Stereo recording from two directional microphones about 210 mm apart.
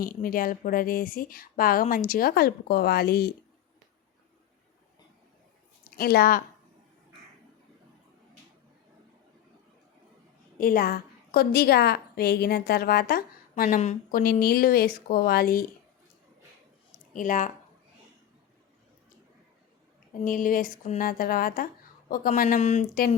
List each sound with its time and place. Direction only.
0.0 s a woman's voice: 45° left (ahead or behind)
5.8 s a woman's voice: 45° left (ahead or behind)
10.6 s a woman's voice: 45° left (ahead or behind)
17.2 s speech: 40° left (ahead or behind)
20.2 s speech: 40° left (ahead or behind)